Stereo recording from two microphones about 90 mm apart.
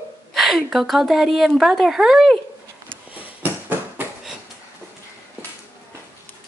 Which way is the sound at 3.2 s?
20° right (ahead or behind).